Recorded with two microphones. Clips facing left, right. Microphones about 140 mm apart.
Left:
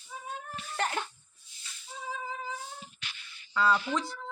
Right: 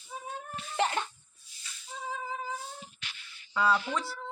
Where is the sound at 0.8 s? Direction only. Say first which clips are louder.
Right 3 dB; centre (ahead or behind).